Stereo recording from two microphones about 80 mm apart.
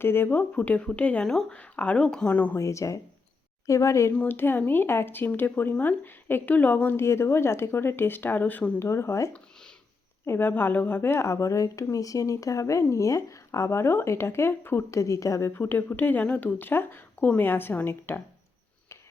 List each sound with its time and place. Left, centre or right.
0.0 s speech: left
2.6 s speech: left
4.3 s speech: left
7.0 s speech: left
8.8 s speech: left